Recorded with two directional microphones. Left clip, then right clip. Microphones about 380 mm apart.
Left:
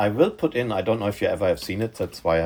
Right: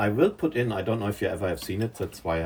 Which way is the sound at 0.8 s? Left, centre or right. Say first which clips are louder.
Left 5 dB; centre.